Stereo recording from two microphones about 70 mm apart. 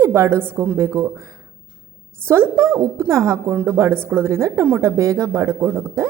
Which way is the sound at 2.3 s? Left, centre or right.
Right.